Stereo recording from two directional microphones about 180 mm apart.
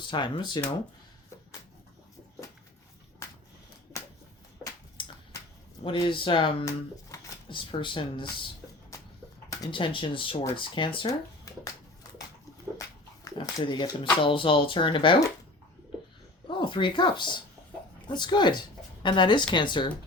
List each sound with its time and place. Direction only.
0.1 s speech: 25° left (ahead or behind)
4.6 s a sound: 20° left (ahead or behind)
5.8 s speech: 30° left (ahead or behind)
9.5 s speech: 30° left (ahead or behind)
12.7 s speech: 20° left (ahead or behind)
16.5 s speech: 25° left (ahead or behind)